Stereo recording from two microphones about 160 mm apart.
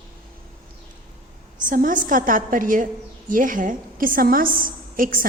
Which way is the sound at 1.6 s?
55° right (ahead or behind).